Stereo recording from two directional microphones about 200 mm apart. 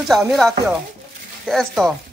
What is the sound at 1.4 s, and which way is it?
Speech, centre (ahead or behind).